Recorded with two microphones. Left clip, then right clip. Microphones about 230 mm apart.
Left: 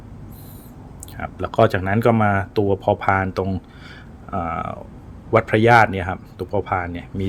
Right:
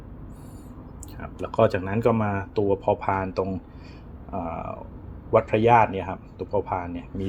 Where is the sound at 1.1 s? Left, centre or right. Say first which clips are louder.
Left 5 dB; left.